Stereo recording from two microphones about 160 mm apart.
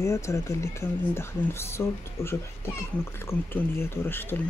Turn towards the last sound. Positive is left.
turn(degrees=15)  # may be behind; listen again after turning